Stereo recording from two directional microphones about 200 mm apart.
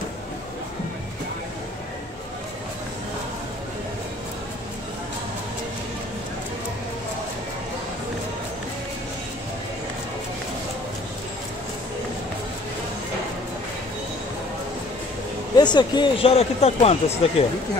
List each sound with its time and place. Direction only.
15.5 s speech: 20° left (ahead or behind)